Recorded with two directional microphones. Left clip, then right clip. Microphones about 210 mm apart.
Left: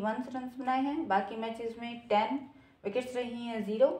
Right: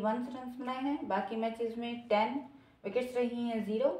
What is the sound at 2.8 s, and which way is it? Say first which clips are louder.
A woman's voice: right 1 dB; 35° left (ahead or behind).